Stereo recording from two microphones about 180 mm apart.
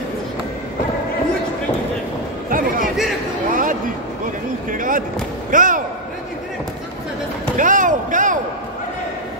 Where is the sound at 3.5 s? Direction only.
50° right (ahead or behind).